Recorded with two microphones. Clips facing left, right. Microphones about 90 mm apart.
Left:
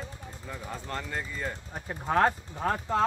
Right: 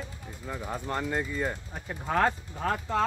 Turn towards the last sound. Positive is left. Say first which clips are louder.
# left 1 dB
turn(degrees=15)  # may be behind; listen again after turning